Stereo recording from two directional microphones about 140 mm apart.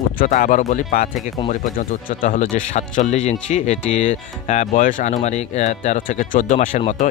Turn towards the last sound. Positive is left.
turn(degrees=65)  # may be behind; listen again after turning